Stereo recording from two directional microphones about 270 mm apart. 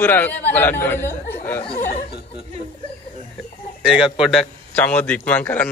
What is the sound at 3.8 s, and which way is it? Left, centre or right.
A man's voice, centre.